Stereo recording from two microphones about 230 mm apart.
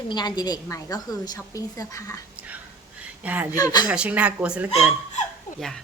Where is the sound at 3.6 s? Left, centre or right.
Centre.